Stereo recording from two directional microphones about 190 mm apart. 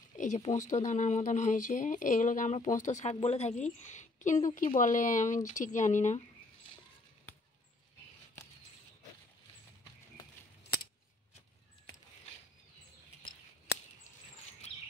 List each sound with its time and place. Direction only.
0.2 s speech: 40° left (ahead or behind)